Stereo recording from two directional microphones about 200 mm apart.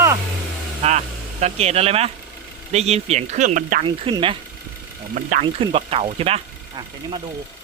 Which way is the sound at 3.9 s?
25° right (ahead or behind).